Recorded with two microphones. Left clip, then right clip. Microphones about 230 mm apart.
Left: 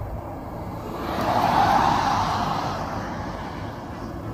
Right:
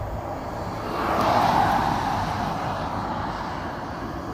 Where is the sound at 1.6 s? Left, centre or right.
Centre.